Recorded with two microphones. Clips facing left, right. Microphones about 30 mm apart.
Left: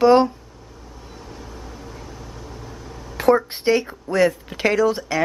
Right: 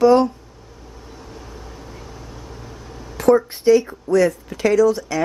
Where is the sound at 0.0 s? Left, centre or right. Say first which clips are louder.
Even; left.